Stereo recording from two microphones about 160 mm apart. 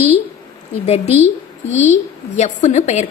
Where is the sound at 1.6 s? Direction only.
45° left (ahead or behind).